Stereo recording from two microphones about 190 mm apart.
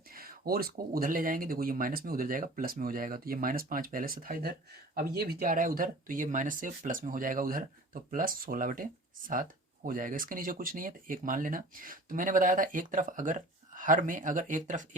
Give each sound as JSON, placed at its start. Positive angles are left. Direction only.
{"t": 0.1, "sound": "speech", "side_deg": -50}